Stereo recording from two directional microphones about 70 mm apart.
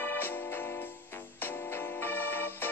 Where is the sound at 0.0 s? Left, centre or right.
Left.